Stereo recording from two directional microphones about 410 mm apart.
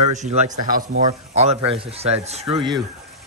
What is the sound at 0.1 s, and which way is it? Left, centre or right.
Speech, centre.